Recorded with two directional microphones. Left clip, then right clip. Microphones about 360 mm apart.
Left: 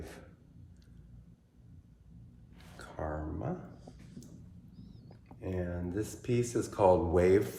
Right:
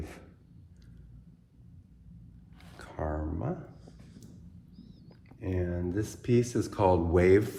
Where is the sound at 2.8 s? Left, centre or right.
Centre.